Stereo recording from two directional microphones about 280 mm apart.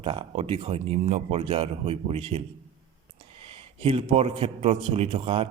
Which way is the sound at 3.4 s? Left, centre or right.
Right.